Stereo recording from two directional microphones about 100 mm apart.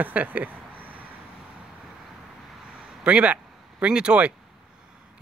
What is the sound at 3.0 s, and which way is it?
Speech, 10° right (ahead or behind).